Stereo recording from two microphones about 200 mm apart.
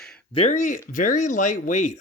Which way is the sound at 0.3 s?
35° left (ahead or behind).